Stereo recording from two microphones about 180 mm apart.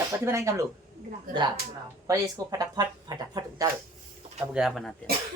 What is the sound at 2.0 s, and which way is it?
Speech, 20° right (ahead or behind).